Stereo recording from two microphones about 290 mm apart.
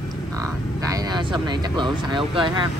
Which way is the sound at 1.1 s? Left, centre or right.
Centre.